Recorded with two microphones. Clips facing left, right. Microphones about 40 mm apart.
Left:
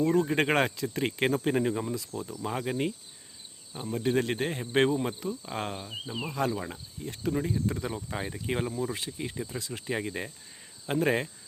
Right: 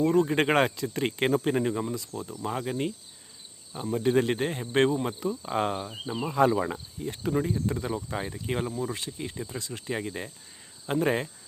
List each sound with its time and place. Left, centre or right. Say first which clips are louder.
0.0 s speech: right 2 dB; centre